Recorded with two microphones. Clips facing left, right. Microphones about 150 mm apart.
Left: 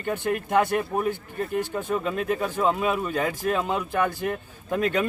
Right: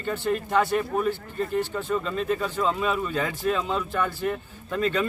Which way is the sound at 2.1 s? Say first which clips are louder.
Even; 60° left (ahead or behind).